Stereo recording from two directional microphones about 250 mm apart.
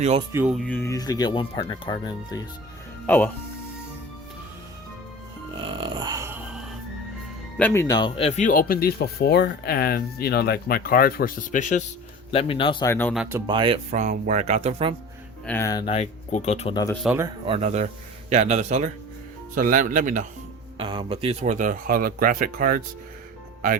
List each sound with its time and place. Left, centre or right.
0.0 s speech: right
0.3 s speech: centre
5.5 s music: centre
7.6 s speech: centre; by 11.8 s left
12.3 s speech: left
13.1 s speech: centre; by 14.9 s right
15.4 s speech: centre
15.9 s speech: left
16.9 s speech: centre
17.2 s speech: right
20.7 s speech: centre